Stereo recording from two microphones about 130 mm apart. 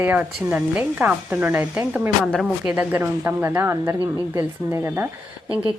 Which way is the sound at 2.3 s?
5° left (ahead or behind).